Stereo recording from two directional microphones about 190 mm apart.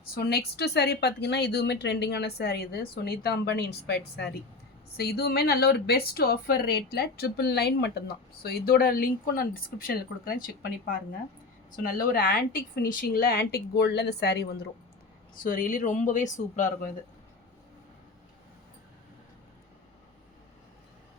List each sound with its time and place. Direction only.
0.1 s a woman's voice: 55° left (ahead or behind)
15.4 s speech: 45° left (ahead or behind)